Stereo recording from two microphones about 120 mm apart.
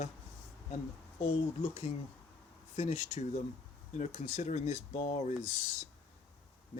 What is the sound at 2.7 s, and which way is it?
Speech, 70° left (ahead or behind).